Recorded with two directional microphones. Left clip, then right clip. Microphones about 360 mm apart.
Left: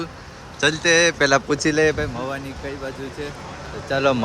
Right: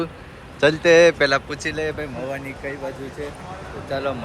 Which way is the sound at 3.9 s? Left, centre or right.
Left.